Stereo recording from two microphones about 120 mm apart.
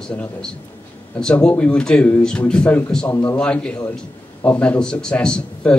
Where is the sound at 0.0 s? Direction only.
5° left (ahead or behind).